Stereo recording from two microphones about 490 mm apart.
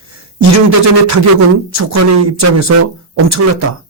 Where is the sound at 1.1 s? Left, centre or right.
Right.